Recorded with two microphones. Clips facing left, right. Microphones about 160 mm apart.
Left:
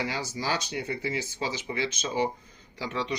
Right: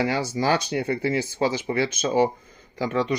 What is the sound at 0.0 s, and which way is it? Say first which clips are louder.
Speech: right 8 dB; 55° right (ahead or behind).